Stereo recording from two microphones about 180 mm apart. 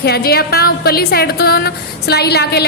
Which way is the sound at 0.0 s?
65° left (ahead or behind).